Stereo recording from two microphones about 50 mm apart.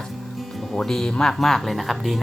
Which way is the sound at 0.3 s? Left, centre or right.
Centre.